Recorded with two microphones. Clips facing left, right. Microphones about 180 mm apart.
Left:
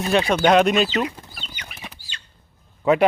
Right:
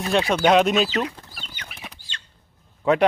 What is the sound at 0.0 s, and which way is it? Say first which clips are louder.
Speech: left 1 dB; centre (ahead or behind).